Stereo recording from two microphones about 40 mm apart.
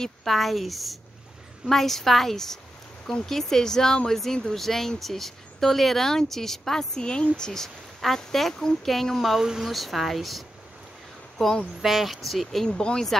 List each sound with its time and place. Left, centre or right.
0.0 s speech: centre
7.0 s speech: left
9.2 s speech: centre
11.4 s speech: centre
11.8 s speech: centre
12.6 s speech: centre